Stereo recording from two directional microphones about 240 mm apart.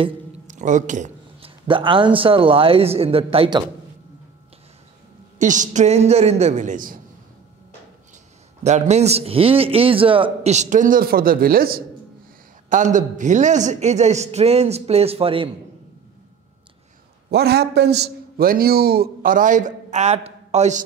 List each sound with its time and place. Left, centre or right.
0.0 s a man's voice: right
5.4 s a man's voice: right
8.6 s a man's voice: right
17.3 s a man's voice: right